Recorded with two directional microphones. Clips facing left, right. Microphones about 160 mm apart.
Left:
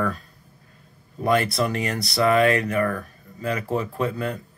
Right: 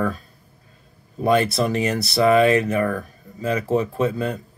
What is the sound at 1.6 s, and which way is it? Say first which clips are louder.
Speech: right 4 dB; 20° right (ahead or behind).